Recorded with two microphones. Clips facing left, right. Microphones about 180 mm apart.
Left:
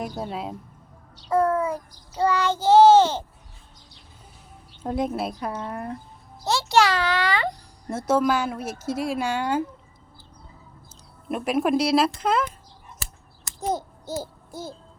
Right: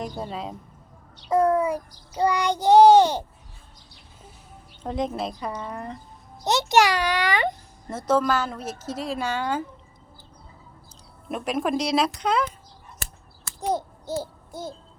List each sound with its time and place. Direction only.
0.0 s speech: 5° left (ahead or behind)
1.1 s child singing: 15° right (ahead or behind)
4.8 s a woman's voice: 5° left (ahead or behind)
6.4 s a child's voice: 20° right (ahead or behind)
7.9 s a woman's voice: 10° left (ahead or behind)
11.3 s speech: 5° left (ahead or behind)
14.2 s a sound: 5° left (ahead or behind)